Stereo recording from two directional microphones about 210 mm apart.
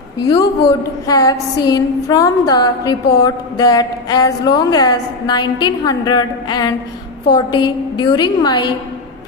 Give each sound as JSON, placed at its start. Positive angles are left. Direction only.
{"t": 1.0, "sound": "a woman's voice", "side_deg": 15}